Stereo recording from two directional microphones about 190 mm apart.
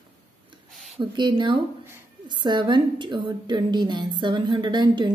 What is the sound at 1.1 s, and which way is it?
A woman's voice, 25° right (ahead or behind).